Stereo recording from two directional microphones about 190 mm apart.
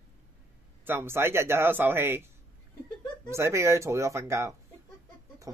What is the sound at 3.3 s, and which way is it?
Speech, 15° right (ahead or behind).